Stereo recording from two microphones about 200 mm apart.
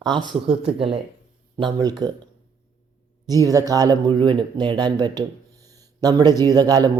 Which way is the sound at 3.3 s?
15° right (ahead or behind).